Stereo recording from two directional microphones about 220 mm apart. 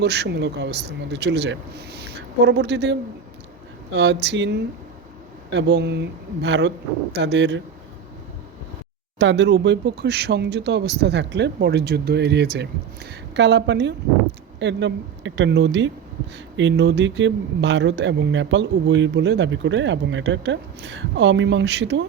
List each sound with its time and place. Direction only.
0.0 s speech: 50° right (ahead or behind)
9.1 s speech: 55° right (ahead or behind)